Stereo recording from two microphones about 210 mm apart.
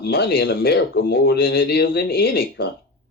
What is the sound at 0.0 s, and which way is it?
A man's voice, 45° left (ahead or behind).